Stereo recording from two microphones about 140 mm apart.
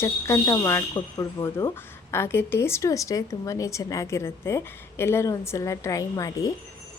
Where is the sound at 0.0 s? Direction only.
20° left (ahead or behind).